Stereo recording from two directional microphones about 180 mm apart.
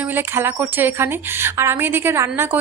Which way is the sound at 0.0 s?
10° right (ahead or behind).